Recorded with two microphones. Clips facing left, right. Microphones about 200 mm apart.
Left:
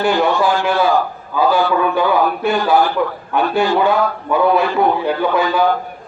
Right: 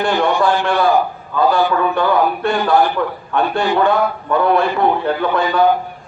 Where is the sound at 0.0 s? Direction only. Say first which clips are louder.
Even; 5° left (ahead or behind).